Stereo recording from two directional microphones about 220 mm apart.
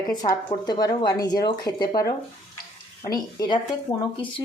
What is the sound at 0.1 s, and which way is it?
Speech, 15° left (ahead or behind).